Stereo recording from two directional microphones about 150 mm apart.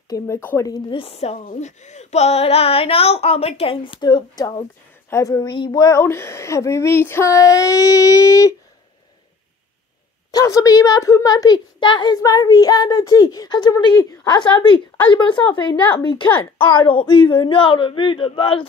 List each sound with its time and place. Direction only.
0.1 s a woman's voice: 15° left (ahead or behind)
0.9 s speech: 40° left (ahead or behind)
1.4 s a woman's voice: 60° left (ahead or behind); by 8.5 s 20° left (ahead or behind)
10.3 s a woman's voice: 20° left (ahead or behind)
15.7 s a woman's voice: 10° left (ahead or behind)
16.0 s speech: 30° left (ahead or behind)
16.3 s a woman's voice: 15° left (ahead or behind)
16.7 s speech: 30° left (ahead or behind)